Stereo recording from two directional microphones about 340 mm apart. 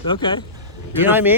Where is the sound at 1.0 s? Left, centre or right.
Centre.